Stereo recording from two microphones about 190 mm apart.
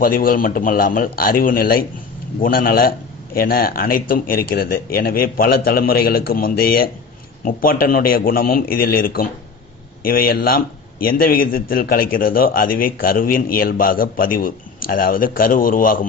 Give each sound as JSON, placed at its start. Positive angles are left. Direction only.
{"t": 0.0, "sound": "a man's voice", "side_deg": 50}